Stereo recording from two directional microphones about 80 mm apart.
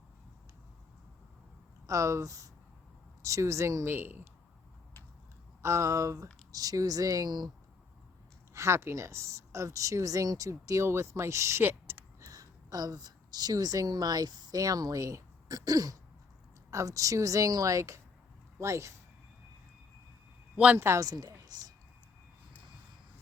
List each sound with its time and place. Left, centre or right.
1.9 s a woman's voice: right
3.9 s speech: right
5.6 s a woman's voice: right
8.5 s speech: right
11.9 s a sound: right
12.2 s a woman's voice: right
20.7 s speech: right
21.0 s a woman's voice: right
21.4 s a sound: right